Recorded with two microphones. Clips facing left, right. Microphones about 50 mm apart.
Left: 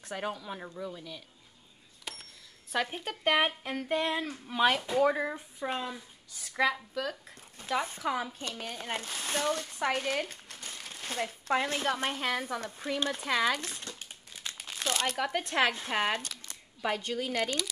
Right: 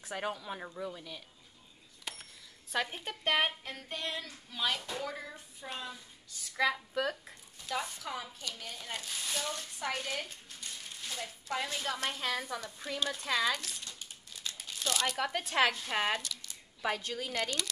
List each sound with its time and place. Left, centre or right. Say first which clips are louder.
0.0 s a woman's voice: left 1 dB; centre
2.1 s cash register: left 1 dB; centre
2.7 s a woman's voice: left 3 dB; centre
3.6 s speech: left 9 dB; left
6.6 s speech: left 2 dB; centre
7.5 s speech: left 5 dB; left
13.3 s crumpling: left 3 dB; left
14.9 s speech: left 2 dB; left
15.1 s a woman's voice: even; centre